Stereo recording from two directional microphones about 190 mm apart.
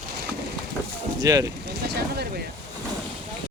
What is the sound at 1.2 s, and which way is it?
Speech, 20° right (ahead or behind).